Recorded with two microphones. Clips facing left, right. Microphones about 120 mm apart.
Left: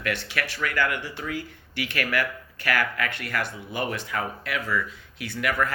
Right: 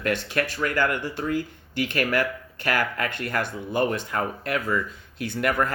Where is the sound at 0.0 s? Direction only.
40° right (ahead or behind).